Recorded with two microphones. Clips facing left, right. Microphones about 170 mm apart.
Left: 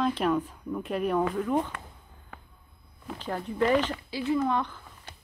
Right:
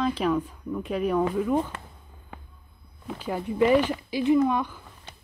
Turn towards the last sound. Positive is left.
turn(degrees=-10)  # may be behind; listen again after turning